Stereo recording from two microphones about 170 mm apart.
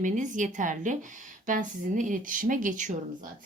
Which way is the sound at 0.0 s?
45° right (ahead or behind).